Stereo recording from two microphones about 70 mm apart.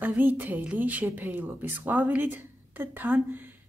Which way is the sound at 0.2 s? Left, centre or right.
Right.